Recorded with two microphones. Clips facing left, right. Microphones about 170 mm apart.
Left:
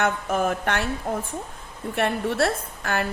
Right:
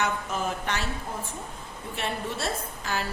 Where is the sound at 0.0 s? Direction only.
55° left (ahead or behind).